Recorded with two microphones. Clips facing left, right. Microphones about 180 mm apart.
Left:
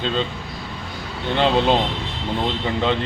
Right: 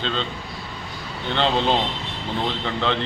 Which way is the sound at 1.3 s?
15° left (ahead or behind).